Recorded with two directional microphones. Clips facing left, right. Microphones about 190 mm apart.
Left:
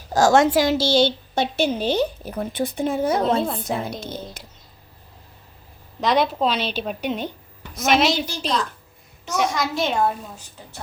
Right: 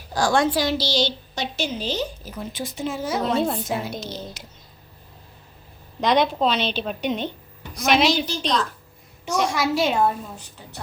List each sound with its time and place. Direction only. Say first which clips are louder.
0.1 s a woman's voice: left 5 dB; 45° left (ahead or behind)
3.4 s a child's voice: right 2 dB; centre (ahead or behind)
4.0 s a woman's voice: left 1 dB; 55° left (ahead or behind)
6.0 s a woman's voice: even; 5° left (ahead or behind)